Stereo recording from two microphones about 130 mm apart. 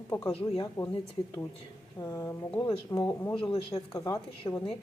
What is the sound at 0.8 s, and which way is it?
Speech, 25° left (ahead or behind).